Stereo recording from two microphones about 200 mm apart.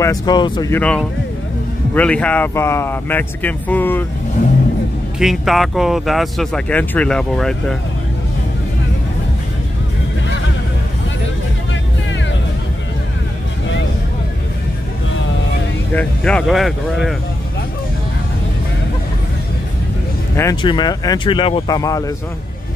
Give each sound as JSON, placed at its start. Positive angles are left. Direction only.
{"t": 0.0, "sound": "speech", "side_deg": 20}
{"t": 5.2, "sound": "speech", "side_deg": 0}
{"t": 15.9, "sound": "speech", "side_deg": 5}
{"t": 20.3, "sound": "speech", "side_deg": 20}